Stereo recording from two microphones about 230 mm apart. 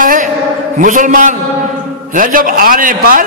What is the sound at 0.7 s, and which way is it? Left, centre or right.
A man's voice, right.